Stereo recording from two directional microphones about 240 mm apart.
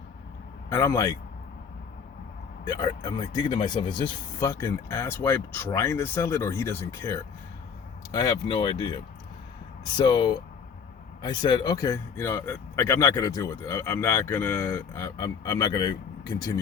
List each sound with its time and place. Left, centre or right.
0.7 s speech: centre
2.6 s speech: centre
10.0 s speech: centre